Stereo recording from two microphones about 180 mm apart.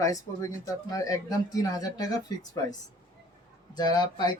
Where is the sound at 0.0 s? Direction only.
20° left (ahead or behind).